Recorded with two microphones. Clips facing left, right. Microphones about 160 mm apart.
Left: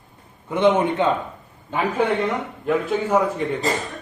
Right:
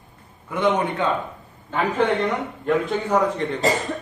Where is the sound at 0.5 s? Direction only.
20° left (ahead or behind).